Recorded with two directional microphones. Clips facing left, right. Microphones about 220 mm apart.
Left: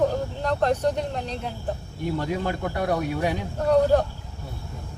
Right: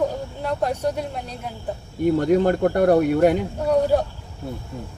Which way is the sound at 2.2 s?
55° right (ahead or behind).